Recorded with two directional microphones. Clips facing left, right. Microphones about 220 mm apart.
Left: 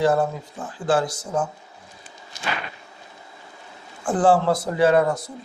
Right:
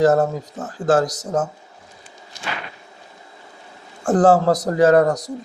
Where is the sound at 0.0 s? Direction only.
45° right (ahead or behind).